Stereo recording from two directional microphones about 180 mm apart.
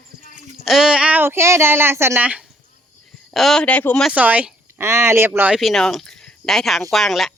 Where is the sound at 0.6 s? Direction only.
Centre (ahead or behind).